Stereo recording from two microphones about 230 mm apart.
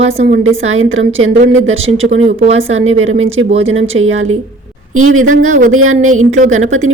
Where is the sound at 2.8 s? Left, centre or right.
Right.